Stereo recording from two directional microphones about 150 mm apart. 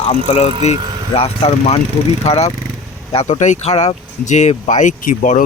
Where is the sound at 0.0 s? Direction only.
45° left (ahead or behind).